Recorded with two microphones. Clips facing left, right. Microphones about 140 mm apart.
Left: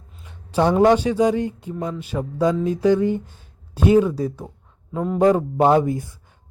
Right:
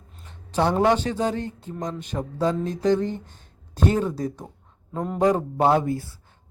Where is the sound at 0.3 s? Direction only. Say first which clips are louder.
Left 3 dB; 10° left (ahead or behind).